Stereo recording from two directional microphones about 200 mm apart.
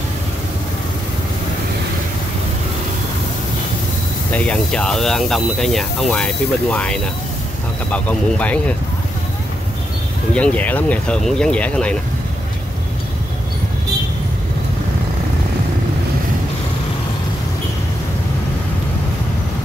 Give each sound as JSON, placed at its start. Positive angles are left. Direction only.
{"t": 4.3, "sound": "speech", "side_deg": 5}
{"t": 10.3, "sound": "speech", "side_deg": 5}